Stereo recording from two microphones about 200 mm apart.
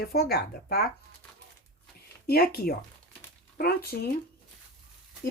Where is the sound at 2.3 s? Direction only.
50° left (ahead or behind).